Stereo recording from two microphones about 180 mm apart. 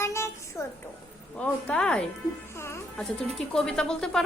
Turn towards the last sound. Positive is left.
turn(degrees=5)  # may be behind; listen again after turning